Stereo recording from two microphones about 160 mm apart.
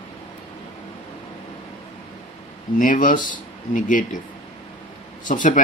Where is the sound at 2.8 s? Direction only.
55° left (ahead or behind).